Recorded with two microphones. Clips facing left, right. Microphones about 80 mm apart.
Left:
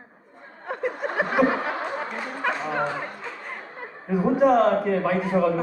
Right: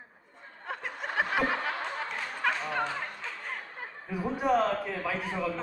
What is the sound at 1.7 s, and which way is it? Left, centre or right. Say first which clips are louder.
Music: left 6 dB; centre.